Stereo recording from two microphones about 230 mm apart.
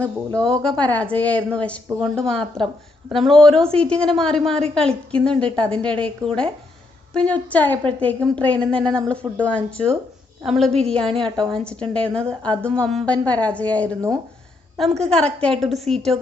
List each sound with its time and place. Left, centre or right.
0.3 s a woman's voice: centre
15.9 s speech: right